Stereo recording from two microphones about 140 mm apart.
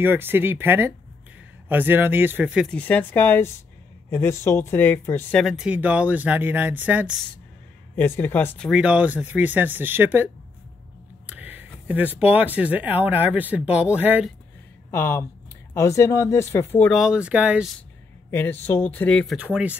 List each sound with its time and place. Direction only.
0.0 s speech: 15° right (ahead or behind)
2.7 s speech: 10° left (ahead or behind)
5.3 s speech: centre (ahead or behind)
7.9 s speech: 15° left (ahead or behind)
8.6 s speech: 5° right (ahead or behind)
14.9 s speech: 15° left (ahead or behind)
16.9 s speech: 5° right (ahead or behind)
18.3 s speech: 15° left (ahead or behind)
19.3 s speech: 10° right (ahead or behind)